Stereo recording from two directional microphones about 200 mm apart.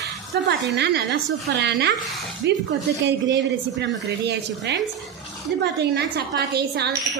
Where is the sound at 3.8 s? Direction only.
60° right (ahead or behind).